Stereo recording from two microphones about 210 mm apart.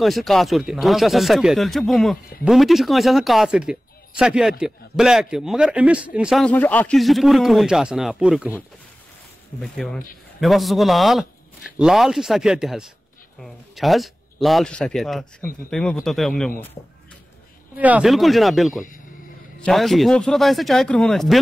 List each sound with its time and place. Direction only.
0.0 s a man's voice: centre (ahead or behind)
9.6 s a man's voice: centre (ahead or behind)
17.7 s a man's voice: 5° right (ahead or behind)